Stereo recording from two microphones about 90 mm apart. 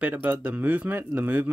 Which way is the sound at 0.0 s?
20° right (ahead or behind).